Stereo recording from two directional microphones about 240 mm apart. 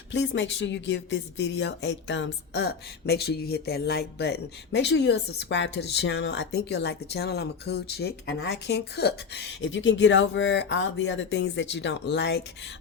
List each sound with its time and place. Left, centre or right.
0.1 s speech: left